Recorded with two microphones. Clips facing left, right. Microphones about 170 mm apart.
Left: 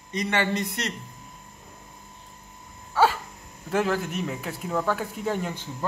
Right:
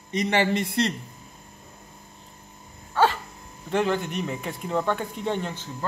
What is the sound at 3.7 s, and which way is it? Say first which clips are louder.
Speech: right 1 dB; 5° left (ahead or behind).